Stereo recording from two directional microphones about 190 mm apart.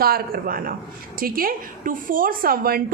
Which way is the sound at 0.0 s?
50° right (ahead or behind).